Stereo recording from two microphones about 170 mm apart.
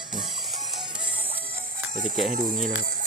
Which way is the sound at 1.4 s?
55° right (ahead or behind).